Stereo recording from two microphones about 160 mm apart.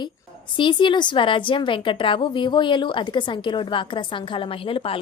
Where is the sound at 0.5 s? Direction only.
30° left (ahead or behind).